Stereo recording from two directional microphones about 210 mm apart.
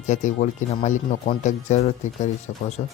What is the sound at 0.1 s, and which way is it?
Speech, 35° left (ahead or behind).